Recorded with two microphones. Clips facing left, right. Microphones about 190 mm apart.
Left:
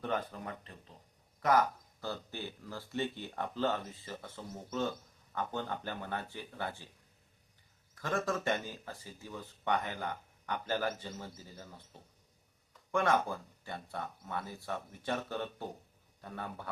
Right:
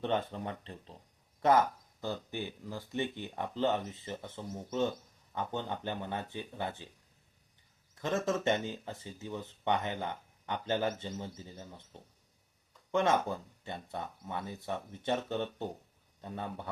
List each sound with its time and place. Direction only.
0.0 s speech: 25° right (ahead or behind)
7.9 s speech: 25° right (ahead or behind)
12.9 s speech: 20° right (ahead or behind)